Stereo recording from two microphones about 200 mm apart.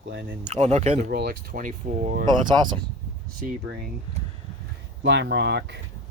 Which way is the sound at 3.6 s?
50° right (ahead or behind).